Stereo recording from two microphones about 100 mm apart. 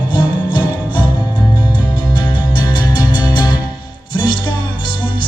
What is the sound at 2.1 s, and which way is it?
Music, 50° left (ahead or behind).